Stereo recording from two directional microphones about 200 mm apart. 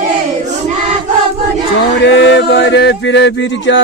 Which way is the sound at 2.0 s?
60° left (ahead or behind).